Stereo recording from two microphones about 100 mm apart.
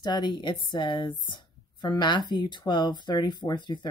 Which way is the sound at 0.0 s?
45° left (ahead or behind).